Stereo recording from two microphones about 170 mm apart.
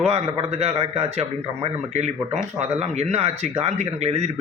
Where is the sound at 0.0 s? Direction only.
40° right (ahead or behind).